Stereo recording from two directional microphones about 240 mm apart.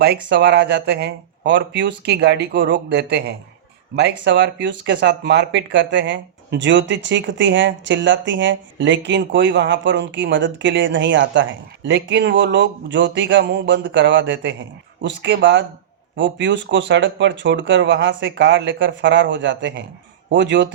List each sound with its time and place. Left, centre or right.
0.0 s speech: right